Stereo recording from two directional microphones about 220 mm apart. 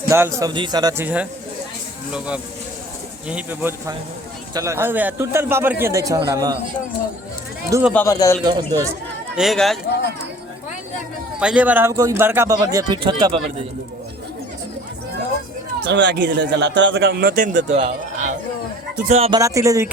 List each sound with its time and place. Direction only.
0.1 s a man's voice: 15° right (ahead or behind)
7.7 s a man's voice: 10° right (ahead or behind)
7.9 s speech: 15° left (ahead or behind)
8.4 s a man's voice: 15° right (ahead or behind)
9.3 s speech: centre (ahead or behind)
11.3 s a man's voice: 5° right (ahead or behind)
15.9 s a man's voice: 55° right (ahead or behind); by 19.4 s 30° right (ahead or behind)
19.4 s a man's voice: 15° right (ahead or behind)